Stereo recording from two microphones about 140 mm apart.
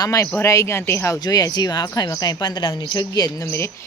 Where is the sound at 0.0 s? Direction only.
25° left (ahead or behind).